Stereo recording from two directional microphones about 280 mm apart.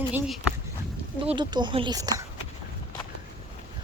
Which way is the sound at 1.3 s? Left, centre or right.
Centre.